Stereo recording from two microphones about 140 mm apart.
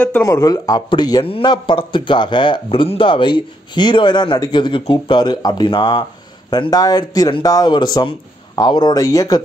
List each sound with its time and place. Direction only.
0.3 s speech: 25° left (ahead or behind)